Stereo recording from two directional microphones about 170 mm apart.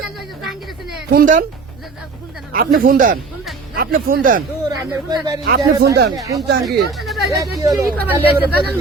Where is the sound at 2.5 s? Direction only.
55° right (ahead or behind).